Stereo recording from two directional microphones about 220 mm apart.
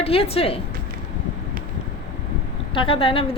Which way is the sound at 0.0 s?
25° left (ahead or behind).